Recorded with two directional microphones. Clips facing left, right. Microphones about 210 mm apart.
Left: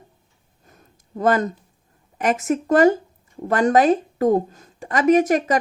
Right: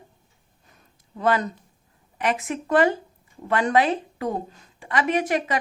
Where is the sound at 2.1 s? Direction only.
45° left (ahead or behind).